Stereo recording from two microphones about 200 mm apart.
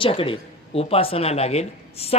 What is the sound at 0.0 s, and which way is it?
Speech, 25° left (ahead or behind).